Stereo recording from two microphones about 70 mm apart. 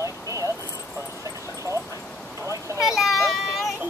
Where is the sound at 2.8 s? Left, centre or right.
Centre.